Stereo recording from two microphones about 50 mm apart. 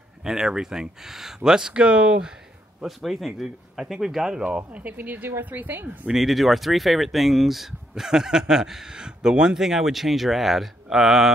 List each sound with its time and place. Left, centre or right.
0.2 s speech: centre
3.0 s speech: centre
4.5 s speech: right
6.1 s speech: centre